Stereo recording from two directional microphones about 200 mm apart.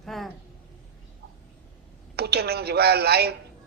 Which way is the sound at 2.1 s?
55° right (ahead or behind).